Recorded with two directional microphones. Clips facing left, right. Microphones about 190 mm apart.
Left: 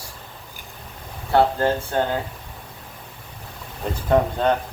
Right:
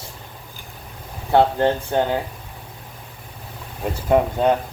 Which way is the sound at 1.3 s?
20° right (ahead or behind).